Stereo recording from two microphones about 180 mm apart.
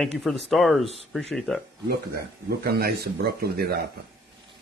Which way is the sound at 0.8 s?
35° right (ahead or behind).